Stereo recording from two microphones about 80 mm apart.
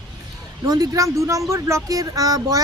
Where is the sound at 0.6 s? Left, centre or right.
Right.